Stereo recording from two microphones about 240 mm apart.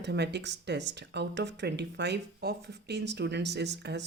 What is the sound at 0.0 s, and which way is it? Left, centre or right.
Speech, right.